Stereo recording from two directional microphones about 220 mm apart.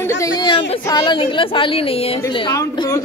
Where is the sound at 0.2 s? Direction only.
20° left (ahead or behind).